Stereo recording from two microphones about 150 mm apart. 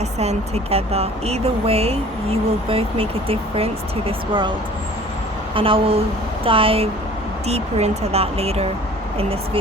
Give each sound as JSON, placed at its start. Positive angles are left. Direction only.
{"t": 0.2, "sound": "speech", "side_deg": -45}
{"t": 5.5, "sound": "speech", "side_deg": -35}